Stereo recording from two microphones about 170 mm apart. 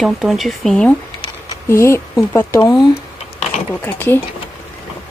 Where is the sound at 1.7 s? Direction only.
15° left (ahead or behind).